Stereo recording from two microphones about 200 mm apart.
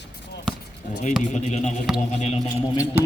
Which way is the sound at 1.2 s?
35° left (ahead or behind).